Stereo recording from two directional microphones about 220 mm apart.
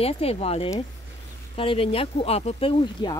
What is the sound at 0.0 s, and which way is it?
Speech, 25° left (ahead or behind).